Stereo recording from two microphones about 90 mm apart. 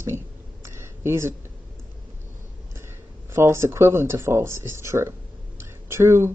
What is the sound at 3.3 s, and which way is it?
Speech, 30° right (ahead or behind).